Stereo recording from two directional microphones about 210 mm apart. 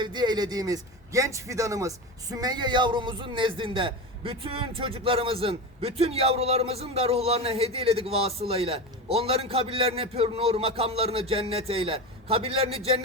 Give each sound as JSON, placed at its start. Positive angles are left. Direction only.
{"t": 0.0, "sound": "a man's voice", "side_deg": -20}